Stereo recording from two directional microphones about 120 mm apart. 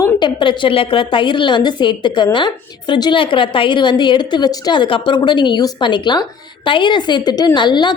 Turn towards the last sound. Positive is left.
turn(degrees=40)  # may be behind; listen again after turning